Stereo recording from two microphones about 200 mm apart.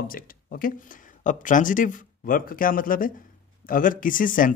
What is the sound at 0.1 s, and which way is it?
Speech, 45° left (ahead or behind).